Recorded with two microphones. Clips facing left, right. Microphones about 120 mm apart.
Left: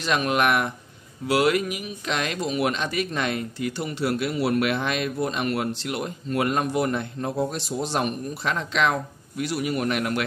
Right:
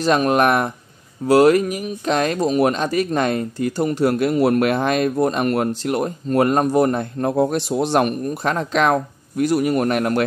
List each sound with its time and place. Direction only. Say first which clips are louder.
0.0 s speech: right 6 dB; 40° right (ahead or behind)
7.2 s speech: right 10 dB; 55° right (ahead or behind)